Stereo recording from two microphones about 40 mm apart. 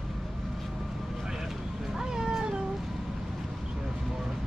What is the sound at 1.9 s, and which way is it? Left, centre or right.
Cat, centre.